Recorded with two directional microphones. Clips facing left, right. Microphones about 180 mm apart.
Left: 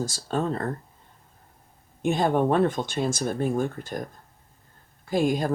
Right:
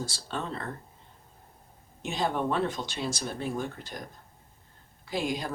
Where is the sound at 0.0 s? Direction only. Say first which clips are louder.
Left 8 dB; 45° left (ahead or behind).